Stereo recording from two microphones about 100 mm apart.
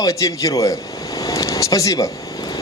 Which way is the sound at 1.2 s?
35° left (ahead or behind).